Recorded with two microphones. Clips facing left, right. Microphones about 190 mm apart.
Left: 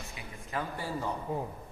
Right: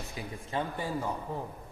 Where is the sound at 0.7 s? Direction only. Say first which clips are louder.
Right 2 dB; 15° right (ahead or behind).